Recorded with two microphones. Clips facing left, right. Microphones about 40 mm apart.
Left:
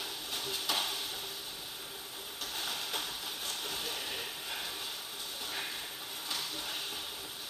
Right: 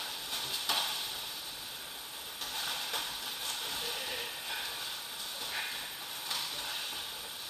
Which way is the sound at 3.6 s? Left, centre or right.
Right.